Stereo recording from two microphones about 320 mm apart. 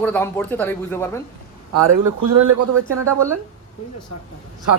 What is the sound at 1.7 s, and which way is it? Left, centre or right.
Speech, right.